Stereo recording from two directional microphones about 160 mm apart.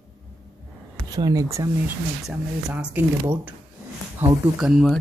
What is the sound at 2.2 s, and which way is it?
Speech, 10° right (ahead or behind).